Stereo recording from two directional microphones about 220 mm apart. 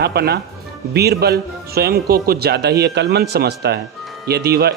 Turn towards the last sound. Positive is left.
turn(degrees=-45)  # may be behind; listen again after turning